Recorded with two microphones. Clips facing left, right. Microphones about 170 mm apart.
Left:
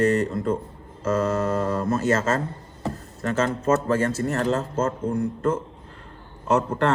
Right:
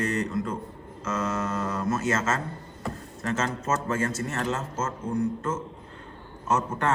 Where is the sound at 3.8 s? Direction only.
35° left (ahead or behind).